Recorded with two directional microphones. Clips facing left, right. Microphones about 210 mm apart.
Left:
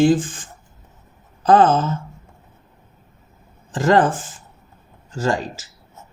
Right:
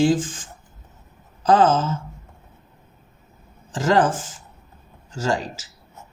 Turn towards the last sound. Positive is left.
turn(degrees=55)  # may be behind; listen again after turning